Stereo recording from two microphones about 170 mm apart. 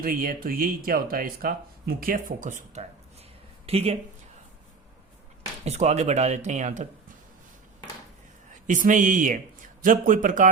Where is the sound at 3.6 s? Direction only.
35° right (ahead or behind).